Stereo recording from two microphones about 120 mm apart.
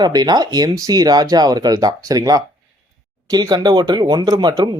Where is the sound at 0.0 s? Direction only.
35° right (ahead or behind).